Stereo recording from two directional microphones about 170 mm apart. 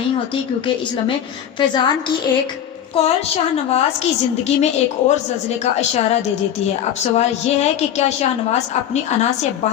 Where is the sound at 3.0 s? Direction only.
35° left (ahead or behind).